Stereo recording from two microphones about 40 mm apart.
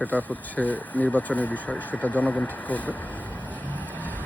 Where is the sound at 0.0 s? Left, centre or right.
Left.